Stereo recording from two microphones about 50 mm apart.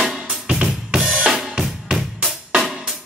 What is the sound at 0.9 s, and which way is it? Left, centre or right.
Drum kit, centre.